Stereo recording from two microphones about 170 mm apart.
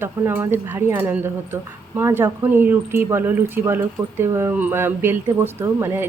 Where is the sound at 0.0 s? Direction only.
15° right (ahead or behind).